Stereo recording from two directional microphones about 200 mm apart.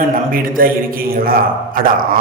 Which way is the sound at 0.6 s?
45° right (ahead or behind).